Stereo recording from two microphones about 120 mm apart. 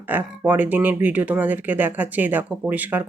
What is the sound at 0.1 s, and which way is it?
Speech, 15° right (ahead or behind).